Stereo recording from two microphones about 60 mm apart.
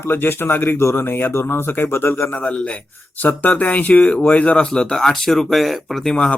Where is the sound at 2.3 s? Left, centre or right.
Left.